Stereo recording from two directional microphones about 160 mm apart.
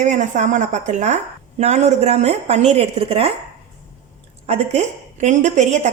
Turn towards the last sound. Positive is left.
turn(degrees=-45)  # may be behind; listen again after turning